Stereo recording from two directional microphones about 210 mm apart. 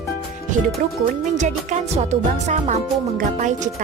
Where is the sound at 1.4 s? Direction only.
35° right (ahead or behind).